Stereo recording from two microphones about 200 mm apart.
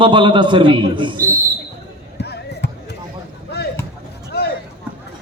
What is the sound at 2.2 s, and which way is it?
Music, 55° left (ahead or behind).